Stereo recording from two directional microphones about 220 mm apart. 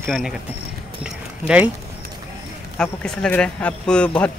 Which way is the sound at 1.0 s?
5° right (ahead or behind).